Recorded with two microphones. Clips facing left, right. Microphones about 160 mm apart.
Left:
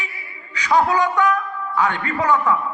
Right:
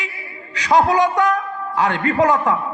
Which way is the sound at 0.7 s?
40° right (ahead or behind).